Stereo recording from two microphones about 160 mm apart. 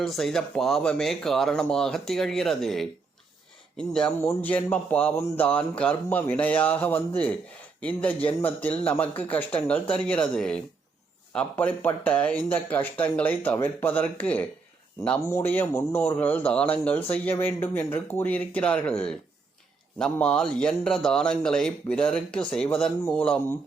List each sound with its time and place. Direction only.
0.0 s a man's voice: centre (ahead or behind)